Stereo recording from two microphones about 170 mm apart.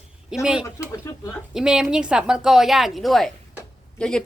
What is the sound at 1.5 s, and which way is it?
A woman's voice, 5° right (ahead or behind).